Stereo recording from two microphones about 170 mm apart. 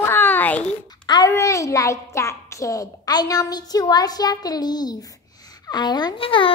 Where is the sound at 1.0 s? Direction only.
20° left (ahead or behind).